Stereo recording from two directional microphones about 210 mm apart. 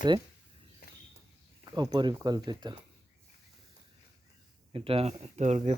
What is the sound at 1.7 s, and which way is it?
Speech, 20° right (ahead or behind).